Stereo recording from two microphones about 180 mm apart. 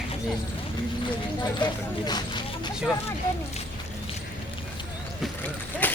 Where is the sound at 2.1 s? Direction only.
25° left (ahead or behind).